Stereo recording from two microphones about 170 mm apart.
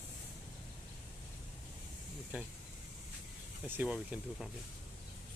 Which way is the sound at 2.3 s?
10° right (ahead or behind).